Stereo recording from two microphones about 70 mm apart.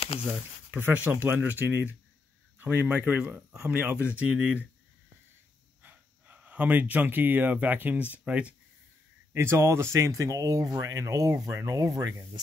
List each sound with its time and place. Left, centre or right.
0.7 s speech: right; by 4.6 s centre
5.8 s speech: right
9.3 s speech: right